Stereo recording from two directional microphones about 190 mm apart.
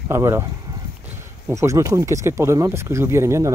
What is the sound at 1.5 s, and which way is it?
Speech, 15° right (ahead or behind).